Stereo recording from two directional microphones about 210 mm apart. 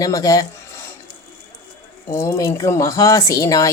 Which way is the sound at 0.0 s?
15° left (ahead or behind).